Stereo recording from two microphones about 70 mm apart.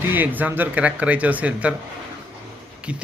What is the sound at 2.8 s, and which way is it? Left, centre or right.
Speech, centre.